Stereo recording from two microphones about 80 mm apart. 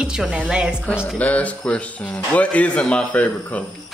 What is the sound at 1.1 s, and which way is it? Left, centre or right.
A man's voice, centre.